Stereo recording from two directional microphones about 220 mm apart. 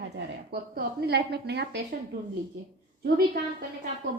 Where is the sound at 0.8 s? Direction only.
50° right (ahead or behind).